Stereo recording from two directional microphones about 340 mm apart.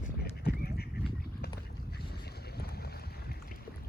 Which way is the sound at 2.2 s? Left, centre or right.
Left.